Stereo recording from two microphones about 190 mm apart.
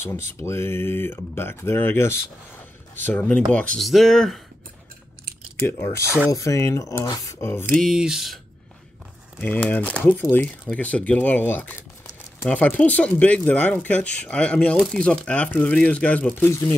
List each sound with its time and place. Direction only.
0.0 s speech: 15° left (ahead or behind)
5.6 s speech: 10° left (ahead or behind)
6.0 s speech: 10° right (ahead or behind)
6.3 s speech: 15° left (ahead or behind)
7.7 s speech: centre (ahead or behind)
9.4 s speech: 10° left (ahead or behind)